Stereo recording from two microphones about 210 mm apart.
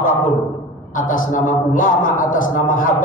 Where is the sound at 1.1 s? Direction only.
40° left (ahead or behind).